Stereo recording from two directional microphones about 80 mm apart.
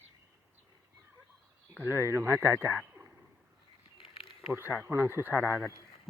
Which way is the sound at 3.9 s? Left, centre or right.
Left.